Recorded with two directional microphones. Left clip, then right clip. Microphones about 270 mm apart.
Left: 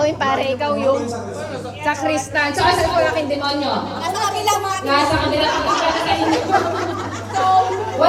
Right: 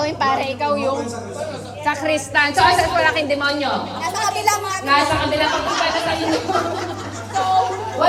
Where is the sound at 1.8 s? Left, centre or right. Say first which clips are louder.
Even; centre.